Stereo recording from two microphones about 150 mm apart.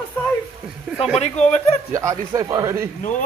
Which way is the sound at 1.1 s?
45° left (ahead or behind).